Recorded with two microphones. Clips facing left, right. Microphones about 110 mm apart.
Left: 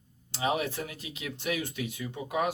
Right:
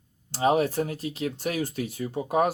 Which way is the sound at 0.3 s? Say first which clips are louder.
Right 7 dB; 40° right (ahead or behind).